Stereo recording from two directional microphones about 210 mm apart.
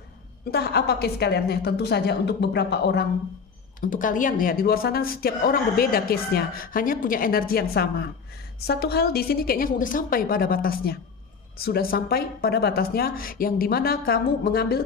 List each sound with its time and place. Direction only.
0.5 s speech: 50° left (ahead or behind)
3.9 s speech: 40° left (ahead or behind)